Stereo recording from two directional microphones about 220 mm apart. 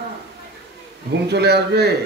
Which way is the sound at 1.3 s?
50° right (ahead or behind).